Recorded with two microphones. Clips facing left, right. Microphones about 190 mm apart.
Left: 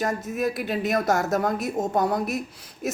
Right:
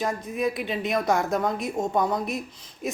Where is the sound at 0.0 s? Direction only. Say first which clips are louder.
Left 1 dB; 5° left (ahead or behind).